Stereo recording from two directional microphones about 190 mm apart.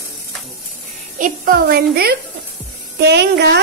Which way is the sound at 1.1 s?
45° right (ahead or behind).